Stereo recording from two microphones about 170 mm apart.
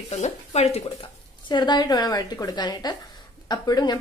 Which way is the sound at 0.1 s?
40° left (ahead or behind).